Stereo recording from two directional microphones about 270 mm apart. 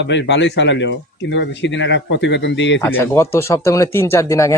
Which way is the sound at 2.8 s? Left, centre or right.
Centre.